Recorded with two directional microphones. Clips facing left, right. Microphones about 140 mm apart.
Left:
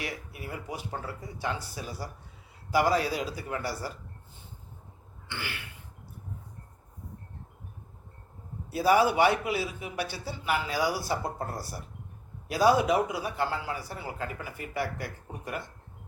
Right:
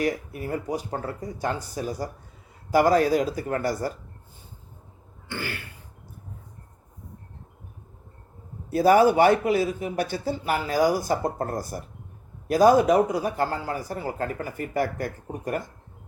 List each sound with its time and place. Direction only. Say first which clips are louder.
0.0 s a man's voice: right 11 dB; 45° right (ahead or behind)
5.3 s a man's voice: right 6 dB; 45° right (ahead or behind)
8.7 s a man's voice: right 6 dB; 45° right (ahead or behind)